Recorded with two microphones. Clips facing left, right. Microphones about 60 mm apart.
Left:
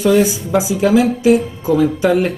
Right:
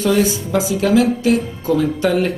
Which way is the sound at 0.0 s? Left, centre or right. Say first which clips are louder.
Left 3 dB; centre.